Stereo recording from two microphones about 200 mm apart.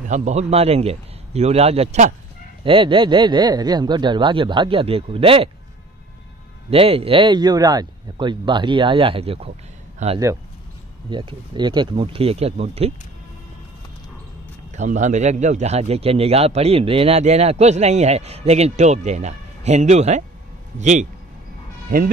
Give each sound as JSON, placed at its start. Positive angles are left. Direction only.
{"t": 0.1, "sound": "a man's voice", "side_deg": -35}
{"t": 2.6, "sound": "speech", "side_deg": -25}
{"t": 6.7, "sound": "a man's voice", "side_deg": -30}
{"t": 11.1, "sound": "speech", "side_deg": -25}
{"t": 14.7, "sound": "a man's voice", "side_deg": -35}